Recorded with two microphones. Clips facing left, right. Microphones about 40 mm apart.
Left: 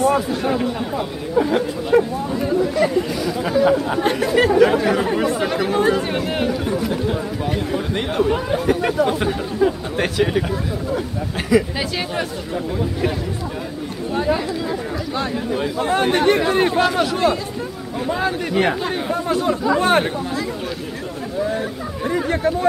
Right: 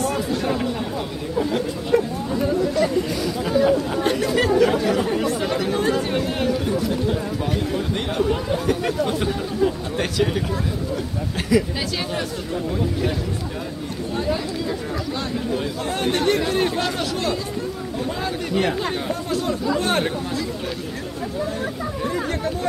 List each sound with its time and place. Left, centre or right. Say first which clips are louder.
0.0 s speech: left 5 dB; centre
11.5 s speech: left 3 dB; centre
14.1 s speech: left 4 dB; centre
18.8 s speech: left 2 dB; centre
19.2 s speech: left 5 dB; left
21.5 s speech: left 1 dB; centre